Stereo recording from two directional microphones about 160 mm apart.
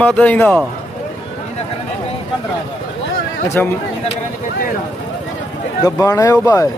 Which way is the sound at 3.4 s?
15° left (ahead or behind).